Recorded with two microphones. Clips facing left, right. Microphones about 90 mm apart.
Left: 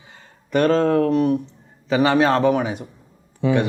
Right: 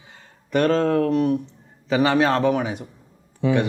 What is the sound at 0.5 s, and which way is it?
A man's voice, 15° left (ahead or behind).